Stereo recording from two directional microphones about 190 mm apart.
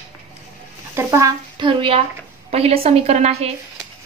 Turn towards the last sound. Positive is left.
turn(degrees=-35)  # may be behind; listen again after turning